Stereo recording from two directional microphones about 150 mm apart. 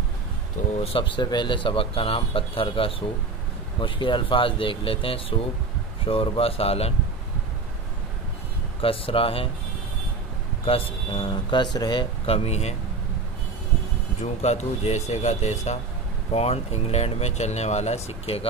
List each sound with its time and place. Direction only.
0.7 s speech: 40° left (ahead or behind)
8.8 s speech: 40° left (ahead or behind)
11.1 s speech: 35° left (ahead or behind)
14.2 s speech: 45° left (ahead or behind)